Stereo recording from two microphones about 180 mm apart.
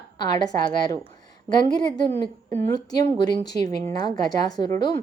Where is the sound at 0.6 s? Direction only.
25° left (ahead or behind).